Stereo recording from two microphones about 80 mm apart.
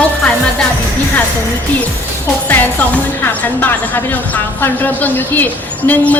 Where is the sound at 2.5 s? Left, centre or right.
Left.